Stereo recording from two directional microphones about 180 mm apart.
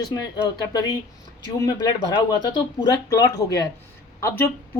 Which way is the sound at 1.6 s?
20° left (ahead or behind).